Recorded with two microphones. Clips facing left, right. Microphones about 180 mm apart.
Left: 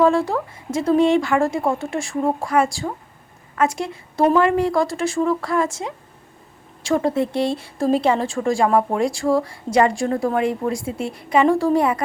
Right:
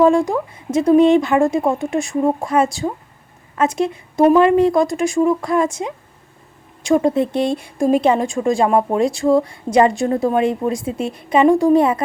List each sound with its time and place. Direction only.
0.0 s a woman's voice: 15° right (ahead or behind)